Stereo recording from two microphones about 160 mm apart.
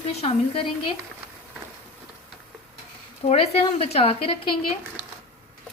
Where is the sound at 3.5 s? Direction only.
40° left (ahead or behind).